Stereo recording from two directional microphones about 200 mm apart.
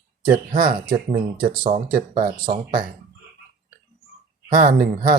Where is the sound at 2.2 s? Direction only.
45° right (ahead or behind).